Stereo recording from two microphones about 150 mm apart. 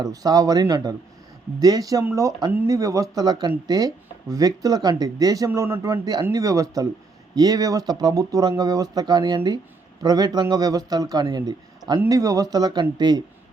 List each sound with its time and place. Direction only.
0.0 s speech: 25° right (ahead or behind)